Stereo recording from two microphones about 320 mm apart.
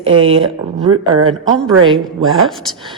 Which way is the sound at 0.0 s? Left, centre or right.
Centre.